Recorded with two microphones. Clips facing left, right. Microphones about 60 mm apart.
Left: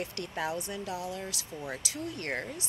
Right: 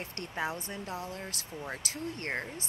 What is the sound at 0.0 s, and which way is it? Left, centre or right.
Speech, right.